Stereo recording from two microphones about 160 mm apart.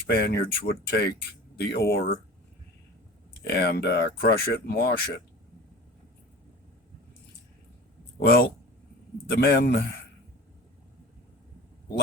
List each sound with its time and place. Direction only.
0.1 s speech: 75° left (ahead or behind)
3.5 s speech: 90° left
8.2 s a man's voice: 75° left (ahead or behind)